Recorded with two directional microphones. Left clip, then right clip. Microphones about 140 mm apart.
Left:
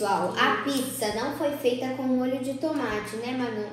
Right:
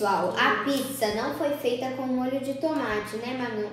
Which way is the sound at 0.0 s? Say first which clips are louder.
Right 1 dB; 15° right (ahead or behind).